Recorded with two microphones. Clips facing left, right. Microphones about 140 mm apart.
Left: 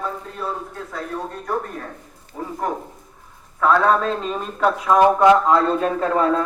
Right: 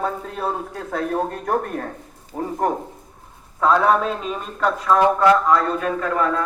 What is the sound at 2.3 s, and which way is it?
Speech, 50° right (ahead or behind).